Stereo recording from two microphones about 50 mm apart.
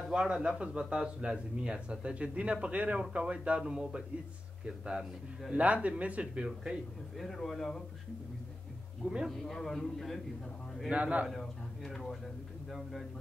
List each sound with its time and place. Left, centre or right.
0.1 s speech: centre
5.5 s speech: right
6.4 s speech: centre
7.2 s speech: centre
9.0 s speech: right
9.5 s speech: centre
10.9 s speech: right
11.2 s speech: centre